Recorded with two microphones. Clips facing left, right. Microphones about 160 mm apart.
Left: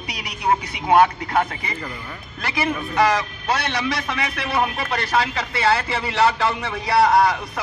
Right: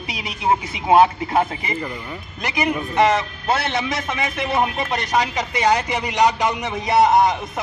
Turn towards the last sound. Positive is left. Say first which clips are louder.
# right 1 dB
turn(degrees=-20)  # may be behind; listen again after turning